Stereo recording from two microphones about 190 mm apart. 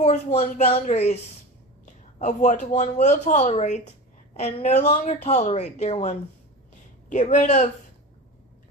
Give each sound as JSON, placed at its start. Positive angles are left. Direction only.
{"t": 0.0, "sound": "speech", "side_deg": 35}